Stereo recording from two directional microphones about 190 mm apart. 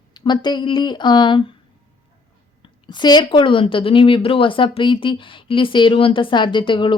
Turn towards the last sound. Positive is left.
turn(degrees=25)  # may be behind; listen again after turning